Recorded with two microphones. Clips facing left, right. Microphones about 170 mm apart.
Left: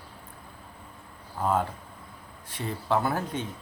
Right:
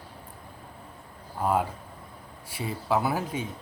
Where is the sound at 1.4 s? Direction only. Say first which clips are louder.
Right 1 dB; 10° right (ahead or behind).